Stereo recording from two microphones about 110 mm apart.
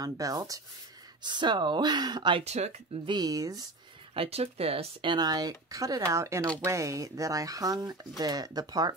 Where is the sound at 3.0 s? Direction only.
40° right (ahead or behind).